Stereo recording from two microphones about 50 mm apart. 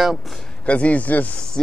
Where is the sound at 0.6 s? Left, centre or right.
Left.